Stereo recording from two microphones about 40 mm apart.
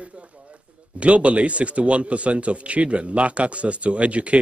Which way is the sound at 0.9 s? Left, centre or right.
Right.